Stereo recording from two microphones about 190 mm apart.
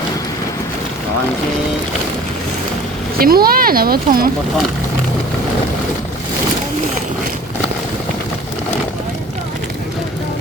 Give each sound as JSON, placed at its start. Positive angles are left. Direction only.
{"t": 3.2, "sound": "speech", "side_deg": -50}